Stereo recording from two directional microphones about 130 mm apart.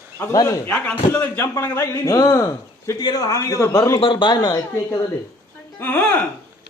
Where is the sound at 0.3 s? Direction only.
25° left (ahead or behind).